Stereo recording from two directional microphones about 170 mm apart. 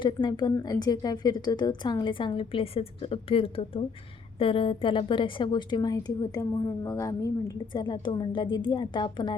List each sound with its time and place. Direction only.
0.0 s a woman's voice: 25° left (ahead or behind)